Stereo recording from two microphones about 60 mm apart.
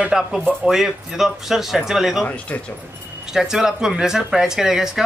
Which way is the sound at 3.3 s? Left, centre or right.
Centre.